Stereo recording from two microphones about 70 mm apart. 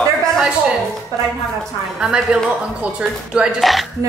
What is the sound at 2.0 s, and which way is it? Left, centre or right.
A woman's voice, centre.